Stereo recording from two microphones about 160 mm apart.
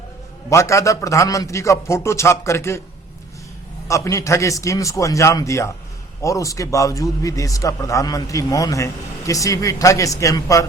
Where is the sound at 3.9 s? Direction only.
20° left (ahead or behind).